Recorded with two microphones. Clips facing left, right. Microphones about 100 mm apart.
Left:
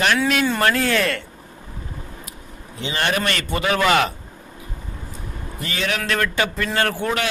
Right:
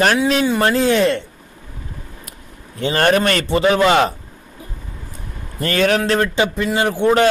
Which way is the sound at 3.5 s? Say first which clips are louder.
Right 4 dB; 25° right (ahead or behind).